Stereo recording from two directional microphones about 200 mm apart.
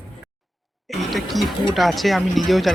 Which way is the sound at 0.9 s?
Centre (ahead or behind).